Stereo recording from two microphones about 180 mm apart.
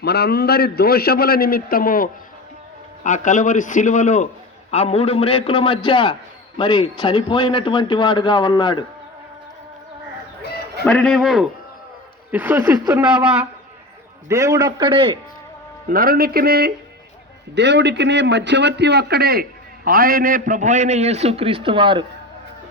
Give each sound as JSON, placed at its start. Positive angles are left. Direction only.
{"t": 0.0, "sound": "a man's voice", "side_deg": 65}
{"t": 10.8, "sound": "a woman's voice", "side_deg": 5}
{"t": 15.9, "sound": "speech", "side_deg": -55}
{"t": 17.5, "sound": "a man's voice", "side_deg": -75}